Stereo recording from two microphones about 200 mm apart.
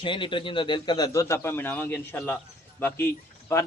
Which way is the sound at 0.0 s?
25° left (ahead or behind).